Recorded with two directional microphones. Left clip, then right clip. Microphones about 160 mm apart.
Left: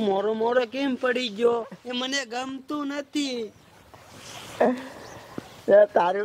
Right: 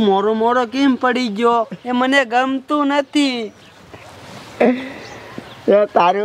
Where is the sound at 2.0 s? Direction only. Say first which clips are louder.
Right 14 dB; 35° right (ahead or behind).